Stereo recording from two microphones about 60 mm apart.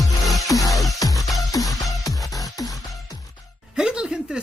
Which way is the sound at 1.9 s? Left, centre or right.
Left.